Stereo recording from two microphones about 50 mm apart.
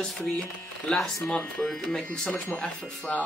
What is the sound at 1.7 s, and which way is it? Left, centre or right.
Speech, centre.